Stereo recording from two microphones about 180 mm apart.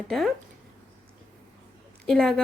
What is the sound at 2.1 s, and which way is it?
Speech, centre (ahead or behind).